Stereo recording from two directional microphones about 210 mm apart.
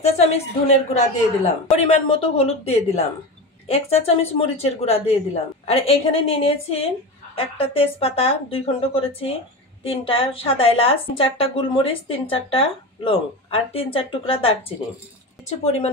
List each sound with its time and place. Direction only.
0.0 s a woman's voice: 30° left (ahead or behind)